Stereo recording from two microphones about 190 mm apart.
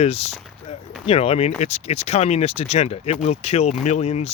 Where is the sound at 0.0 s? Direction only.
35° left (ahead or behind).